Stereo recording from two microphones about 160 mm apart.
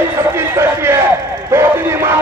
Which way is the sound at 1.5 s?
15° right (ahead or behind).